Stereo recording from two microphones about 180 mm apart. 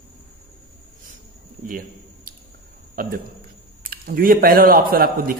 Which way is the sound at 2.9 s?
55° right (ahead or behind).